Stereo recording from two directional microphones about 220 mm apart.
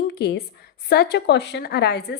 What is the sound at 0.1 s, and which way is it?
A woman's voice, 45° left (ahead or behind).